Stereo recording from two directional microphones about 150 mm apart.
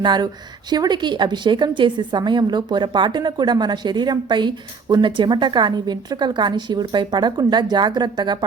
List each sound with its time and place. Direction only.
0.0 s a woman's voice: 30° right (ahead or behind)